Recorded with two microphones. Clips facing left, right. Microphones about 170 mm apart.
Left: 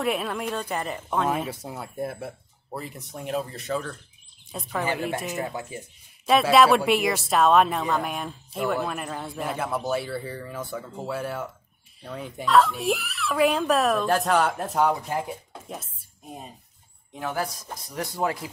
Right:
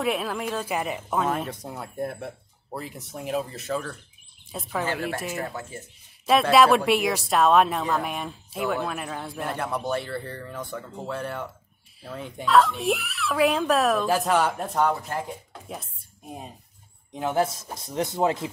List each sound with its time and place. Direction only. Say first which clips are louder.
0.0 s speech: even; centre (ahead or behind)
1.2 s speech: left 1 dB; 5° left (ahead or behind)
5.4 s speech: left 2 dB; 15° left (ahead or behind)
6.2 s speech: even; centre (ahead or behind)
17.1 s speech: right 5 dB; 20° right (ahead or behind)